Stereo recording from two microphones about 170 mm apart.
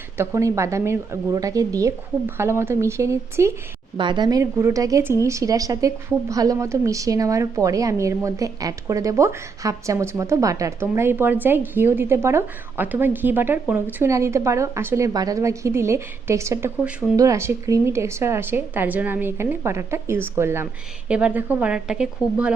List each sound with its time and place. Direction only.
0.2 s a woman's voice: 15° right (ahead or behind)
3.9 s a woman's voice: 30° right (ahead or behind); by 22.5 s 5° right (ahead or behind)